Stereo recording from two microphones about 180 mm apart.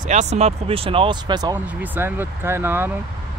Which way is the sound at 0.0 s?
40° right (ahead or behind).